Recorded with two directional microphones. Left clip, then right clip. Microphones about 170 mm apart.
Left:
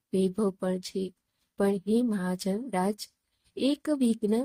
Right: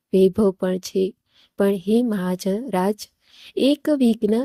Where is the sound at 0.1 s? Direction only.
35° right (ahead or behind).